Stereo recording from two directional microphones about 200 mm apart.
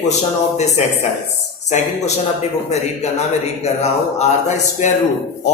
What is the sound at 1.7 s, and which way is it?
Speech, 35° left (ahead or behind).